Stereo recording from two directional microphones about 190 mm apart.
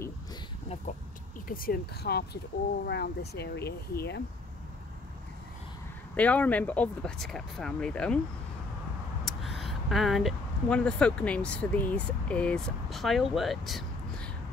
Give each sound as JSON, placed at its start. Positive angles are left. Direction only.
{"t": 1.5, "sound": "speech", "side_deg": 50}
{"t": 6.1, "sound": "speech", "side_deg": 5}
{"t": 9.2, "sound": "speech", "side_deg": 0}